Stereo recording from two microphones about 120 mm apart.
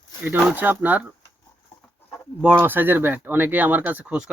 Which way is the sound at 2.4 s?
15° right (ahead or behind).